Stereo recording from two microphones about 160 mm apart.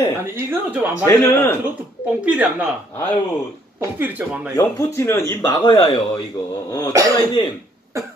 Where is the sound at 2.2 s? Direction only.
10° right (ahead or behind).